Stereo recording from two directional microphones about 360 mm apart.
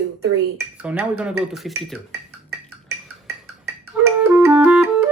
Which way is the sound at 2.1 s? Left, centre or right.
Right.